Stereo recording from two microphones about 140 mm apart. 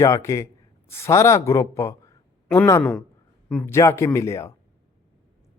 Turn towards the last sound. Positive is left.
turn(degrees=20)  # may be behind; listen again after turning